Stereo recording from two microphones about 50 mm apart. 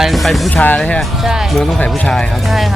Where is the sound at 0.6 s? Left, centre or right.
Left.